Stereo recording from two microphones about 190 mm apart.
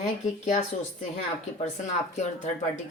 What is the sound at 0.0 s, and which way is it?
Speech, 40° left (ahead or behind).